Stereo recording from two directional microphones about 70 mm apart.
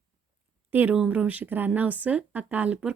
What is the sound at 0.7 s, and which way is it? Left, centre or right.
Speech, right.